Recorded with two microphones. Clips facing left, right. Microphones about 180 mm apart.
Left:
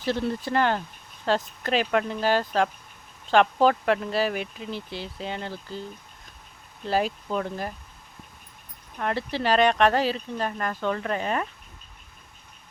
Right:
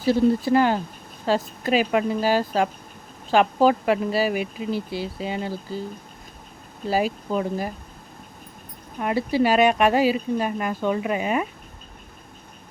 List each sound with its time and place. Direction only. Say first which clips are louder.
0.0 s speech: right 8 dB; 10° right (ahead or behind)
6.8 s speech: right 2 dB; 10° right (ahead or behind)
9.0 s speech: right 7 dB; 10° right (ahead or behind)